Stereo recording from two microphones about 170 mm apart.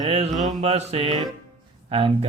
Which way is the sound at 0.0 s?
35° right (ahead or behind).